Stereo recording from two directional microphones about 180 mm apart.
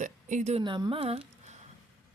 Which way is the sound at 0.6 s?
25° right (ahead or behind).